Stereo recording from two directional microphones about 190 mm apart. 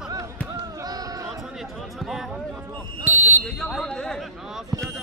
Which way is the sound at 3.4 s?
5° left (ahead or behind).